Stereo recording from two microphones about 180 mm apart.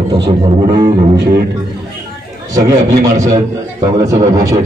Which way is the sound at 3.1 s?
40° right (ahead or behind).